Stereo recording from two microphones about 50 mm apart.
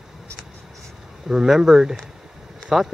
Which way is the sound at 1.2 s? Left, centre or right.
Centre.